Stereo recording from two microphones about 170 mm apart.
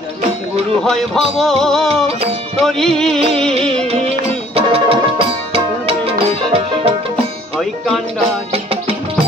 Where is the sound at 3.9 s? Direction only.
35° right (ahead or behind).